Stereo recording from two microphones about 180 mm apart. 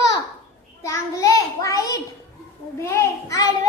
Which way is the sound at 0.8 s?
15° left (ahead or behind).